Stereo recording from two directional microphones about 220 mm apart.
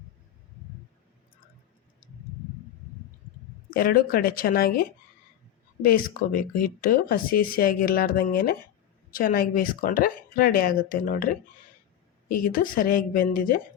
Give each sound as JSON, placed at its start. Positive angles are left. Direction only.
{"t": 3.7, "sound": "speech", "side_deg": 40}
{"t": 12.3, "sound": "speech", "side_deg": 40}